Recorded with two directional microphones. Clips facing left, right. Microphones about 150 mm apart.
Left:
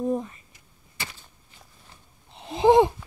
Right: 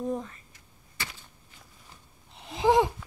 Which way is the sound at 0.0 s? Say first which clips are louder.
Left 5 dB; 15° left (ahead or behind).